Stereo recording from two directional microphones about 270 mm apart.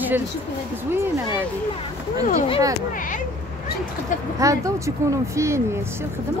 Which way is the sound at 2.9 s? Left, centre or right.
Left.